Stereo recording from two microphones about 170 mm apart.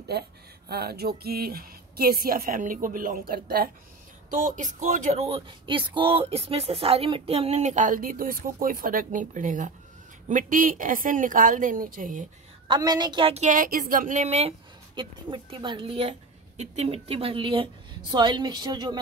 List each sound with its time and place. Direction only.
0.1 s speech: 75° right (ahead or behind)
4.3 s speech: 50° right (ahead or behind)
12.6 s a woman's voice: 25° right (ahead or behind); by 14.5 s 40° right (ahead or behind)
15.0 s a woman's voice: 30° right (ahead or behind)